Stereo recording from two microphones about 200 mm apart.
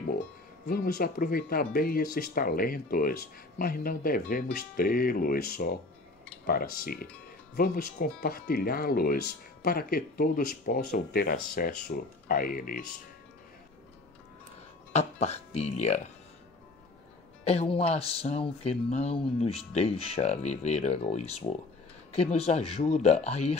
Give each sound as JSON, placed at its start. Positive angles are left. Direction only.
{"t": 0.7, "sound": "speech", "side_deg": 50}
{"t": 14.9, "sound": "speech", "side_deg": 35}
{"t": 17.5, "sound": "speech", "side_deg": 30}